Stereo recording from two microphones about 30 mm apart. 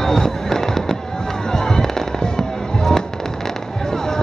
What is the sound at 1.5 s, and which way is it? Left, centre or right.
Fireworks, centre.